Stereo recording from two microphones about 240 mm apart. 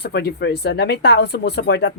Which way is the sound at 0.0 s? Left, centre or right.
Left.